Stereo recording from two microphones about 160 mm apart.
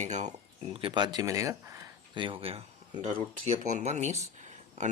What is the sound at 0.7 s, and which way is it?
Speech, 30° right (ahead or behind).